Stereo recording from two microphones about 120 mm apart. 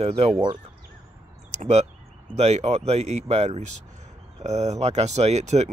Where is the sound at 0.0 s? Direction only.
60° right (ahead or behind).